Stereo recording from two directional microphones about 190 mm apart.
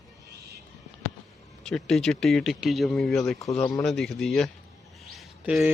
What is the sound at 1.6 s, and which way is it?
Speech, 5° left (ahead or behind).